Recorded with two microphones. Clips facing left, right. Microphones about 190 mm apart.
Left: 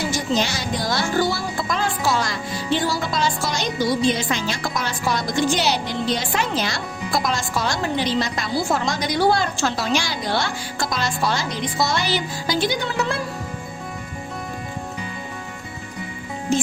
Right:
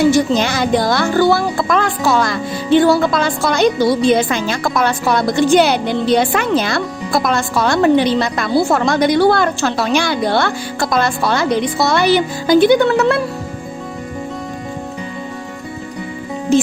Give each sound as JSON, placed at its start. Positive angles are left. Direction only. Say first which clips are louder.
{"t": 0.0, "sound": "speech", "louder": "right 10 dB", "side_deg": -60}